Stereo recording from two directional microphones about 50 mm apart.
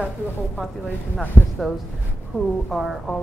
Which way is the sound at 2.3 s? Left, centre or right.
Centre.